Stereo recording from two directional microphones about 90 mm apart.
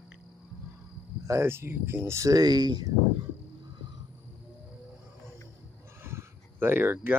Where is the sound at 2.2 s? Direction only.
45° right (ahead or behind).